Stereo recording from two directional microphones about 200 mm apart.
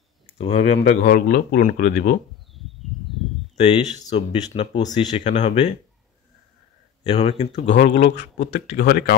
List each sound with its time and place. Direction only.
0.4 s speech: 35° left (ahead or behind)
0.8 s speech: 50° left (ahead or behind)
2.5 s a sound: centre (ahead or behind)
4.1 s speech: 30° left (ahead or behind)
7.0 s speech: 30° left (ahead or behind)
7.6 s speech: 60° left (ahead or behind)